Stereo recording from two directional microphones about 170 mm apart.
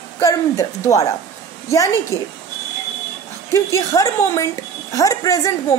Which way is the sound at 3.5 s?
20° left (ahead or behind).